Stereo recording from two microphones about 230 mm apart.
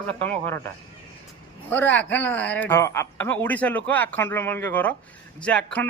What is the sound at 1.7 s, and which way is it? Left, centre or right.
A man's voice, centre.